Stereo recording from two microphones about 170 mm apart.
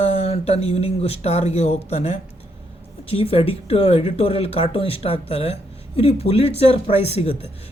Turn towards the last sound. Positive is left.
turn(degrees=35)  # may be behind; listen again after turning